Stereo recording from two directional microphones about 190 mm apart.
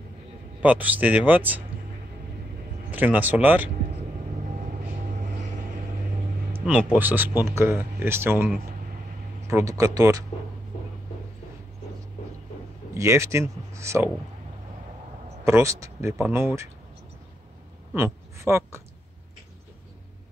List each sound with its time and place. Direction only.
0.6 s speech: 10° right (ahead or behind)
2.9 s speech: 10° right (ahead or behind)
4.6 s vehicle: 45° right (ahead or behind)
6.6 s speech: 10° right (ahead or behind)
12.9 s speech: 15° right (ahead or behind)
15.4 s speech: 15° right (ahead or behind)
17.9 s speech: 15° right (ahead or behind)